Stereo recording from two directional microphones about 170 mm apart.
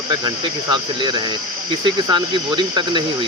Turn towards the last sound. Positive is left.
turn(degrees=-30)  # may be behind; listen again after turning